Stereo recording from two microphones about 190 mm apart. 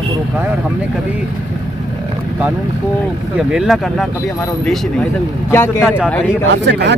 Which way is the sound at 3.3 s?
5° right (ahead or behind).